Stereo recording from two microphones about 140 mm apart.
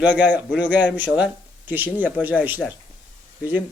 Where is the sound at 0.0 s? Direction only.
10° right (ahead or behind).